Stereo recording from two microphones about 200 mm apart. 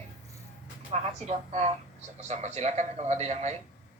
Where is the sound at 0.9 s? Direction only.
35° right (ahead or behind).